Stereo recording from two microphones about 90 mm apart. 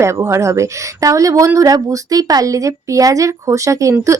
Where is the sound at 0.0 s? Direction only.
30° right (ahead or behind).